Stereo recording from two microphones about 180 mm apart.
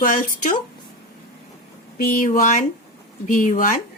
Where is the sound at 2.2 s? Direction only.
45° left (ahead or behind).